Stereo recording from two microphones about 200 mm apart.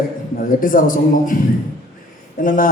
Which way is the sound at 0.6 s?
45° left (ahead or behind).